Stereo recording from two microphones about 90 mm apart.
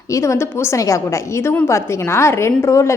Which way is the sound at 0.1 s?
35° left (ahead or behind).